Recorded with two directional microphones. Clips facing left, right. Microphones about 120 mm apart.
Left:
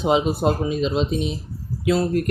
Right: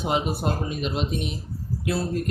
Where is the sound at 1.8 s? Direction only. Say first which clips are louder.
Left 7 dB; 90° left.